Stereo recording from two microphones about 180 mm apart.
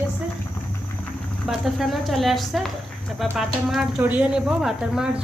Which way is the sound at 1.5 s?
Centre (ahead or behind).